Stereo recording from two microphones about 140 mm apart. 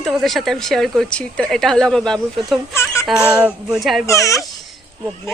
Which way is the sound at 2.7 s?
20° left (ahead or behind).